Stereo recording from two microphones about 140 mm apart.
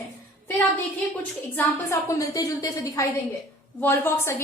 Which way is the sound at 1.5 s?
20° left (ahead or behind).